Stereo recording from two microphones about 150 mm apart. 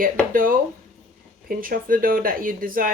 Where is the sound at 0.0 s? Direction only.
65° right (ahead or behind).